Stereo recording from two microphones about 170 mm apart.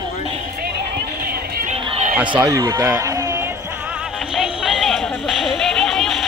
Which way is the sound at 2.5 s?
20° right (ahead or behind).